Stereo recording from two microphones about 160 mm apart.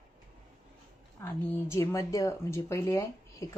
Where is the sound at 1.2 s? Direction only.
15° left (ahead or behind).